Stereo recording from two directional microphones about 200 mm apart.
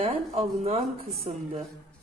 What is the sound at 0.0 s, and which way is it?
Speech, 30° right (ahead or behind).